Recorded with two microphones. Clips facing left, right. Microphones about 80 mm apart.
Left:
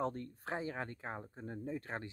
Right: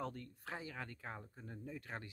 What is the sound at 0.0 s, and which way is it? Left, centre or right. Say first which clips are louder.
Speech: left 7 dB; left.